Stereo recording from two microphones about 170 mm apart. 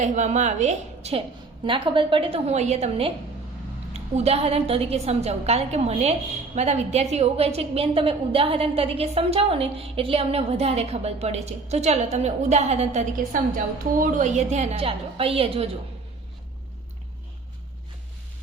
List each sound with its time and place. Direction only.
0.0 s a woman's voice: 45° right (ahead or behind)
1.9 s a woman's voice: 30° right (ahead or behind)